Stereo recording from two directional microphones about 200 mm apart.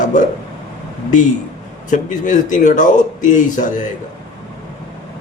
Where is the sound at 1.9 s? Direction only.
40° left (ahead or behind).